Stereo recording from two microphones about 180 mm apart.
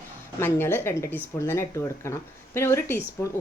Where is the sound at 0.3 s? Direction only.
10° left (ahead or behind).